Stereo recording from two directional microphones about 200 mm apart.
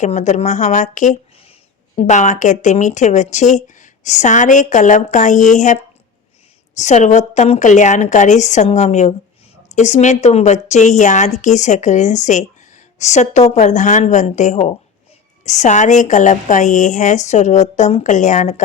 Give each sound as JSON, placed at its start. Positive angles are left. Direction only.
{"t": 0.0, "sound": "speech", "side_deg": 35}